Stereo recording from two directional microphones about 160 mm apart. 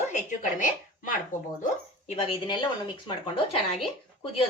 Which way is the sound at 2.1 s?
35° left (ahead or behind).